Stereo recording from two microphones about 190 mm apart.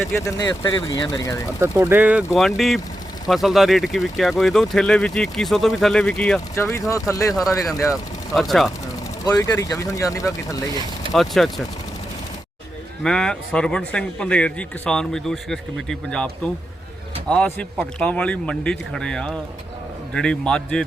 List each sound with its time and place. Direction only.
0.1 s speech: 15° left (ahead or behind)
1.5 s speech: 10° right (ahead or behind); by 6.4 s 5° left (ahead or behind)
6.6 s speech: 15° left (ahead or behind)
8.3 s speech: centre (ahead or behind)
9.2 s speech: 20° left (ahead or behind)
11.1 s speech: centre (ahead or behind)
13.0 s speech: 5° left (ahead or behind)